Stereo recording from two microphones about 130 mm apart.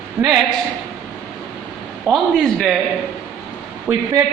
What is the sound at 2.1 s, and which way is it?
Speech, 25° right (ahead or behind).